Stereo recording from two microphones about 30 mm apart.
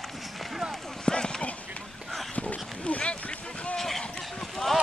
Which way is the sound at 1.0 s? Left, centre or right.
Left.